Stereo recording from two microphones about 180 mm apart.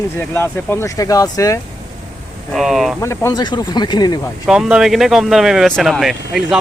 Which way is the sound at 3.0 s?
15° left (ahead or behind).